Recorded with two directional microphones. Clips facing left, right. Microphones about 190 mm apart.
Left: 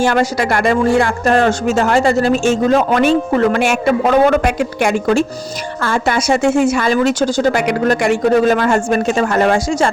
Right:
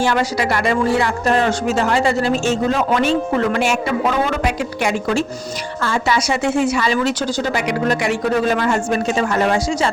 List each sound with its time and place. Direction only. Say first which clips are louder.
0.0 s speech: left 3 dB; 50° left (ahead or behind)